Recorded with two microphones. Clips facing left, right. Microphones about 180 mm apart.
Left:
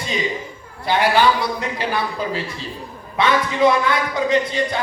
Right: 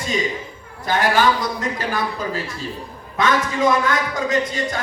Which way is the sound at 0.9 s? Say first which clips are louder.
Left 1 dB; 45° right (ahead or behind).